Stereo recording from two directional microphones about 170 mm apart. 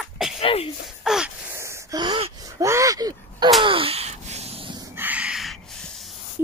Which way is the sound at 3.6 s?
30° right (ahead or behind).